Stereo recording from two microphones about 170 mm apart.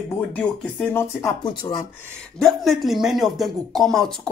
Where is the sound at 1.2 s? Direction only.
25° left (ahead or behind).